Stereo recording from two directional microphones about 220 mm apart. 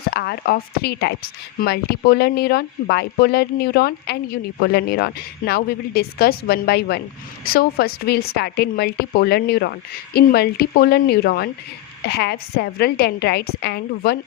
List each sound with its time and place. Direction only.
0.1 s a woman's voice: 45° left (ahead or behind)